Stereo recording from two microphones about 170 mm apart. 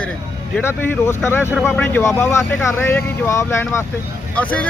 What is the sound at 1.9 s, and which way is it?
Speech, 10° left (ahead or behind).